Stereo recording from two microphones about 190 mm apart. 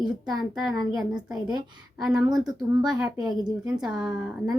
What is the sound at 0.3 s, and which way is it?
Speech, centre (ahead or behind).